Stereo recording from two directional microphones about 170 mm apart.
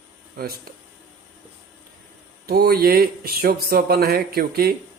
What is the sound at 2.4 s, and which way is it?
Speech, 65° right (ahead or behind).